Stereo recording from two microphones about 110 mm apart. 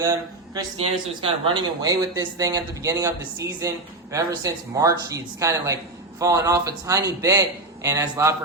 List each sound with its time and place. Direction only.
0.0 s speech: 30° right (ahead or behind)
0.8 s speech: 50° right (ahead or behind)
1.8 s speech: 35° right (ahead or behind)